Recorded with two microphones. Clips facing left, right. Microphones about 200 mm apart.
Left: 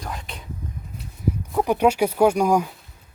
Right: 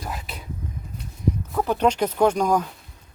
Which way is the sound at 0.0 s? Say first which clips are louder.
Even; 5° right (ahead or behind).